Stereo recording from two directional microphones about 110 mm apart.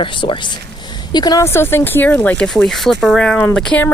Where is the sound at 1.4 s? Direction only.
20° left (ahead or behind); by 3.8 s 5° left (ahead or behind).